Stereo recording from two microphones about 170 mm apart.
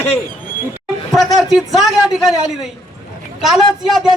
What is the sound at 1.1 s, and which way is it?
A man's voice, centre (ahead or behind).